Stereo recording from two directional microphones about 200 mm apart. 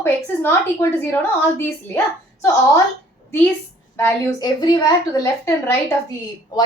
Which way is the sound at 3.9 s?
15° left (ahead or behind).